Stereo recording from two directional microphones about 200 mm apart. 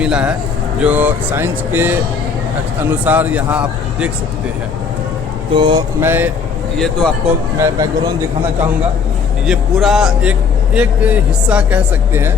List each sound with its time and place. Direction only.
0.0 s speech: 5° right (ahead or behind)
5.5 s a sound: 25° right (ahead or behind)
6.0 s speech: 10° right (ahead or behind)
6.7 s speech: 5° left (ahead or behind)
7.6 s speech: 15° right (ahead or behind)
9.5 s speech: centre (ahead or behind)